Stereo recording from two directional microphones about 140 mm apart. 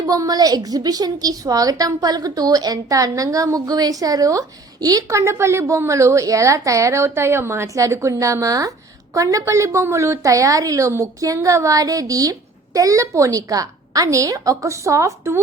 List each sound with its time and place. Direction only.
0.1 s a woman's voice: 25° right (ahead or behind)